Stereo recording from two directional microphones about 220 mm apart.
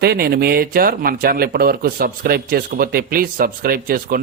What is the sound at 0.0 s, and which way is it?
Speech, 45° right (ahead or behind).